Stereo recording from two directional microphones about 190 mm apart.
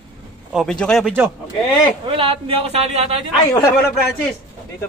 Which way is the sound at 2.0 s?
30° right (ahead or behind).